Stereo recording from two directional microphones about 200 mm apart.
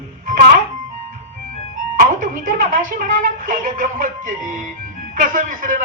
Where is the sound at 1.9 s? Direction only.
40° right (ahead or behind).